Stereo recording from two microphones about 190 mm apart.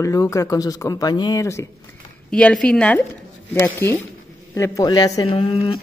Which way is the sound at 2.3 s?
5° left (ahead or behind).